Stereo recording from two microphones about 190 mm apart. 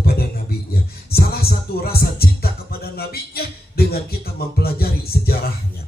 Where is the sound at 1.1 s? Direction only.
55° left (ahead or behind).